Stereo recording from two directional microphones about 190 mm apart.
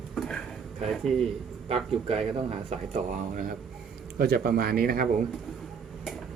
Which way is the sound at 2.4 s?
40° right (ahead or behind).